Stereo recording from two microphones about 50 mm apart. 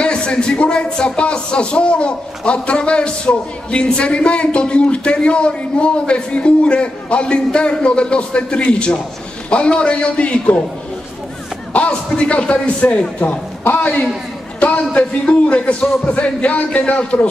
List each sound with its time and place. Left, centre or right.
0.0 s speech: centre
11.7 s speech: left